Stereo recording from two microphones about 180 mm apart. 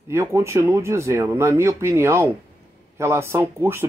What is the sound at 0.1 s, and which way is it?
Speech, 15° right (ahead or behind).